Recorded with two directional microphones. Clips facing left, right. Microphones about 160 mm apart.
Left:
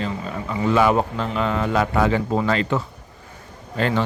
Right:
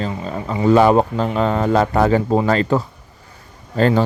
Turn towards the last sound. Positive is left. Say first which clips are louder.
# right 6 dB
turn(degrees=-40)  # may be behind; listen again after turning